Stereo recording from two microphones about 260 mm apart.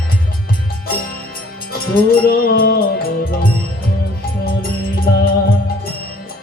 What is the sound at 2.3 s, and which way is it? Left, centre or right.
Music, left.